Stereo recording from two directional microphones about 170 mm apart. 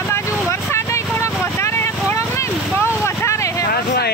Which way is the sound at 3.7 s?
70° left (ahead or behind).